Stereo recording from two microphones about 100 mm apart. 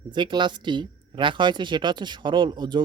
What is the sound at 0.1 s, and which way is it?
Speech, 50° right (ahead or behind).